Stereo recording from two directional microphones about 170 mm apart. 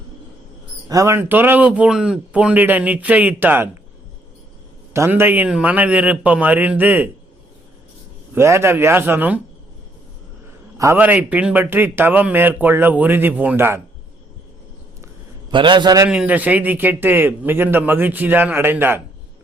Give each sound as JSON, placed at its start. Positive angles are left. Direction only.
{"t": 0.9, "sound": "a man's voice", "side_deg": -20}
{"t": 4.9, "sound": "a man's voice", "side_deg": -15}
{"t": 8.4, "sound": "a man's voice", "side_deg": -15}
{"t": 10.8, "sound": "a man's voice", "side_deg": -15}
{"t": 15.0, "sound": "a sound", "side_deg": -25}
{"t": 16.0, "sound": "a man's voice", "side_deg": -10}